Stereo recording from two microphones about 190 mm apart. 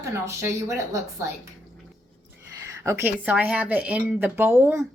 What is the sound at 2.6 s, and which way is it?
Speech, 15° right (ahead or behind).